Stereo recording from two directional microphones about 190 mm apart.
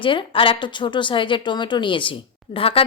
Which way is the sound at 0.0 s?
25° left (ahead or behind).